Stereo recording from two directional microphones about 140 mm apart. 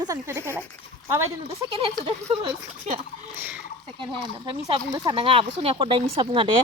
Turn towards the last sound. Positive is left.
turn(degrees=-35)  # may be behind; listen again after turning